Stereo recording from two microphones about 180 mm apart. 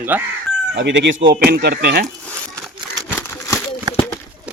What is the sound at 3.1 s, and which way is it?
Crumpling, 15° left (ahead or behind).